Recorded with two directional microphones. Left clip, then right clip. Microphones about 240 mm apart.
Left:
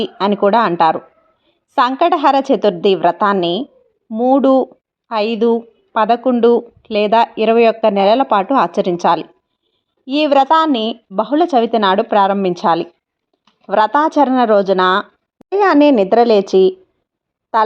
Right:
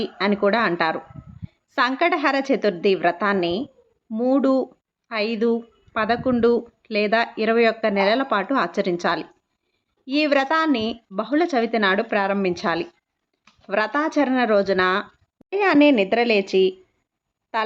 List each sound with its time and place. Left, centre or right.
0.0 s speech: centre